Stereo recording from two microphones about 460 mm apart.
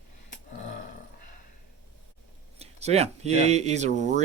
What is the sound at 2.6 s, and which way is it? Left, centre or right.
Speech, centre.